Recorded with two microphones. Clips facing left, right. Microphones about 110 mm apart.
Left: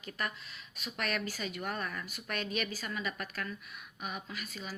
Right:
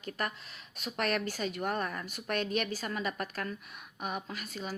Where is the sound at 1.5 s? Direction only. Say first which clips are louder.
Right 4 dB; 40° right (ahead or behind).